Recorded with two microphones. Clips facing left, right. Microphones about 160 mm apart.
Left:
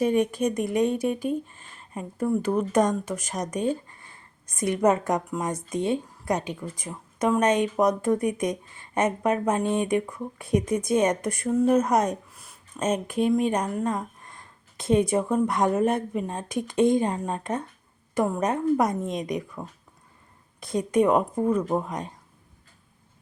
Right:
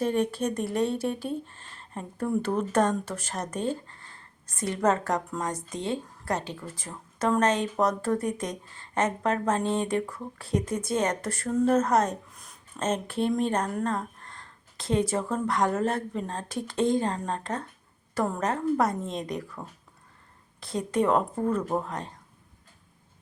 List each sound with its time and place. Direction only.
0.0 s a woman's voice: 10° left (ahead or behind)